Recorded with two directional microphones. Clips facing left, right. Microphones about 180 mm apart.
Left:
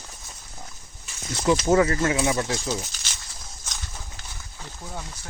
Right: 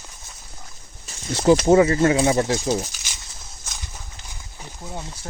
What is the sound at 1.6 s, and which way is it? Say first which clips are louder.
Speech: right 5 dB; 25° right (ahead or behind).